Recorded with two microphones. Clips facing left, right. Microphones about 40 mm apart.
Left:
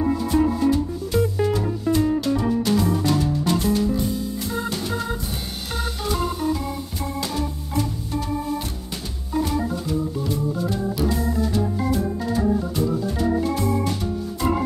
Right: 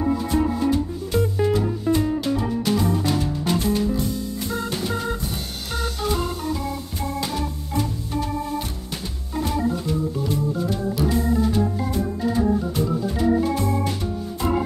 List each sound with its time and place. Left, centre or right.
0.2 s music: centre
9.3 s organ: centre
11.1 s organ: centre